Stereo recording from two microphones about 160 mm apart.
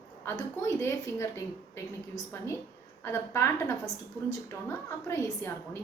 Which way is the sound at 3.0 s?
15° left (ahead or behind).